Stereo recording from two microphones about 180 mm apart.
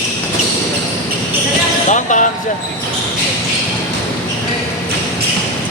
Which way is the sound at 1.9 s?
45° left (ahead or behind).